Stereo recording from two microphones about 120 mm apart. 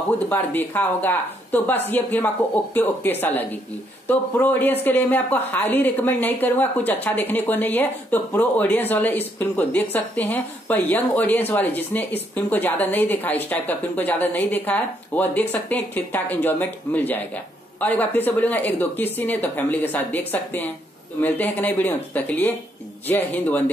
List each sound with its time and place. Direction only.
0.3 s speech: 15° left (ahead or behind)